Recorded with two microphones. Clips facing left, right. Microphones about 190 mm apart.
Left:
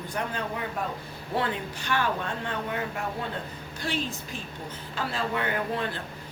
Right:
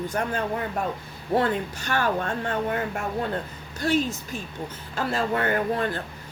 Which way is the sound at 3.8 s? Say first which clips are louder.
Right 8 dB; 45° right (ahead or behind).